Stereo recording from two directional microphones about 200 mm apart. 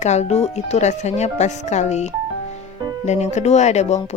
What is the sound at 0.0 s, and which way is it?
Speech, 35° left (ahead or behind).